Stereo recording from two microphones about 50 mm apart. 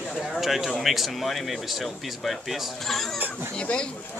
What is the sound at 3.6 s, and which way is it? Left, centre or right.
Speech, centre.